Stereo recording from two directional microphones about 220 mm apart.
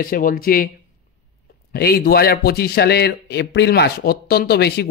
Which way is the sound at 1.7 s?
45° left (ahead or behind).